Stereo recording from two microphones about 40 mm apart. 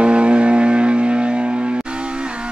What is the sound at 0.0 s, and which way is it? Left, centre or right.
Vehicle, right.